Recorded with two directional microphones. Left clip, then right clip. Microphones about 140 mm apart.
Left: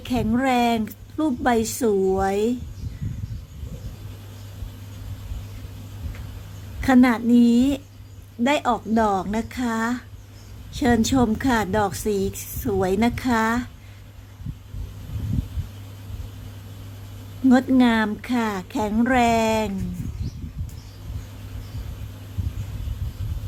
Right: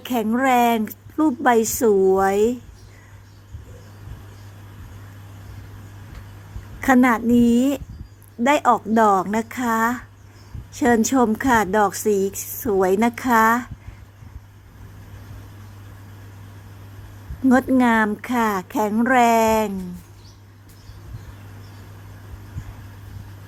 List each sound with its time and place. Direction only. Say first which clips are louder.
0.0 s a woman's voice: right 3 dB; 20° right (ahead or behind)
6.8 s a woman's voice: right 2 dB; 20° right (ahead or behind)
17.5 s a woman's voice: right 2 dB; 15° right (ahead or behind)